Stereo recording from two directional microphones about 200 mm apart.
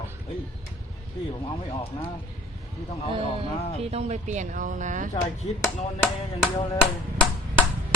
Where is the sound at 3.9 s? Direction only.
35° right (ahead or behind).